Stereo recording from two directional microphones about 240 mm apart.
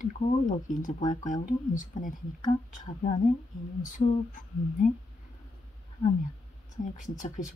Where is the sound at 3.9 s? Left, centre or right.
Left.